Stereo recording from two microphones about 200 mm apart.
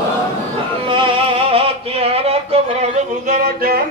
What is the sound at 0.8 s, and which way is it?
Music, 25° right (ahead or behind).